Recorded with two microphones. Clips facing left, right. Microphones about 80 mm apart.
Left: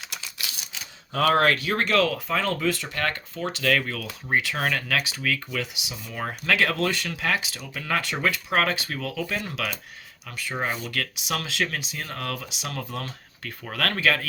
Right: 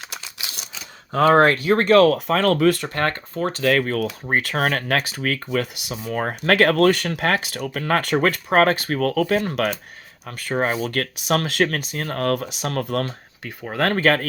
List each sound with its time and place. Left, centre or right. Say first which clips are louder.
1.1 s speech: right 6 dB; right
2.0 s speech: right 8 dB; right
13.4 s speech: right 6 dB; right